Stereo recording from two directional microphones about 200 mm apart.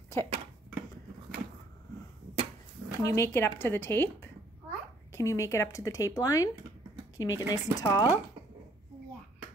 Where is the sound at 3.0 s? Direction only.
15° left (ahead or behind).